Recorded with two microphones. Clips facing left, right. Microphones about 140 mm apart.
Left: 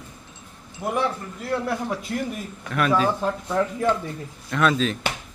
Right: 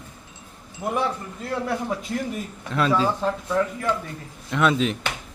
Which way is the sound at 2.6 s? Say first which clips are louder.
Even; 25° right (ahead or behind).